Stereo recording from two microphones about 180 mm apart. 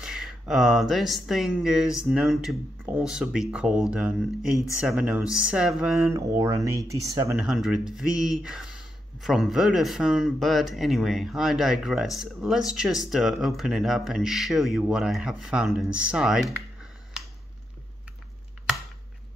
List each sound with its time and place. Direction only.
0.0 s speech: 5° right (ahead or behind)
6.0 s speech: 20° right (ahead or behind)
7.3 s speech: centre (ahead or behind)